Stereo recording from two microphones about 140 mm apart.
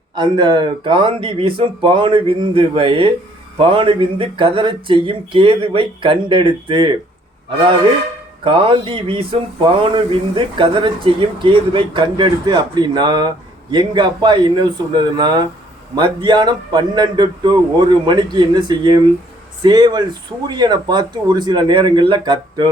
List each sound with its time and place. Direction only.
0.2 s speech: 30° right (ahead or behind)
8.4 s speech: 40° right (ahead or behind)